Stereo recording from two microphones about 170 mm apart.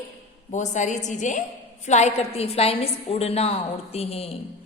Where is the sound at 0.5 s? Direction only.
45° left (ahead or behind).